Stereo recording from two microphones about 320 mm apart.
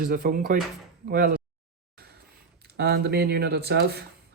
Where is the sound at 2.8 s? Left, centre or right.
Right.